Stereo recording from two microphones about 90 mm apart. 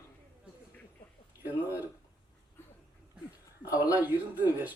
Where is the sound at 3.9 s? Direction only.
20° right (ahead or behind).